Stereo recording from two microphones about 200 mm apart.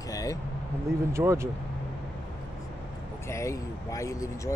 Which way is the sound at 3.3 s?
15° left (ahead or behind).